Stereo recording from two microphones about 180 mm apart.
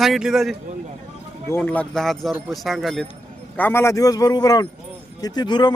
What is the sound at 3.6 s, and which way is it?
A man's voice, 10° left (ahead or behind).